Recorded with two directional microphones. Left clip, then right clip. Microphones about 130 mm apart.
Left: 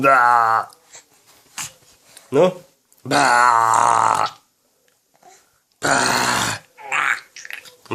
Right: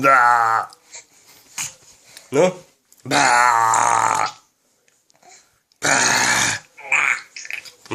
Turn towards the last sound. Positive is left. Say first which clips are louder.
# right 1 dB
turn(degrees=0)  # may be behind; listen again after turning